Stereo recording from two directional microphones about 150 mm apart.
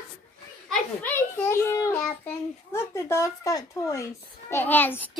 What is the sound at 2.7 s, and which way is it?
Speech, 15° left (ahead or behind).